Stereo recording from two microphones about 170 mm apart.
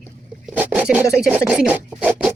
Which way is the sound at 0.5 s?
10° right (ahead or behind).